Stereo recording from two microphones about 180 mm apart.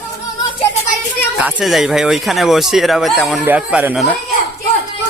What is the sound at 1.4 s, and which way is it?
Speech, 5° right (ahead or behind).